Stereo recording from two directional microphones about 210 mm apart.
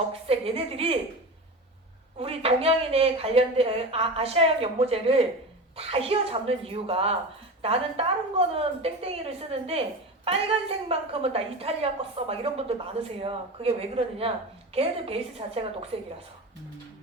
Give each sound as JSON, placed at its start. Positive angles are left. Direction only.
{"t": 0.3, "sound": "a woman's voice", "side_deg": -25}
{"t": 2.1, "sound": "a woman's voice", "side_deg": -25}
{"t": 10.8, "sound": "a woman's voice", "side_deg": -25}